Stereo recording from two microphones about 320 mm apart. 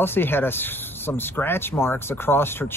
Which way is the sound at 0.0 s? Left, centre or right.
Centre.